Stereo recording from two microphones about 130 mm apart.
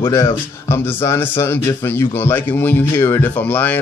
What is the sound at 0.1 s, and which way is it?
Speech, 20° left (ahead or behind).